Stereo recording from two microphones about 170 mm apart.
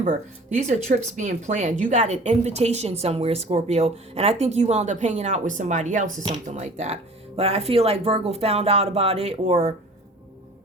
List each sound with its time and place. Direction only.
0.7 s a woman's voice: 45° right (ahead or behind)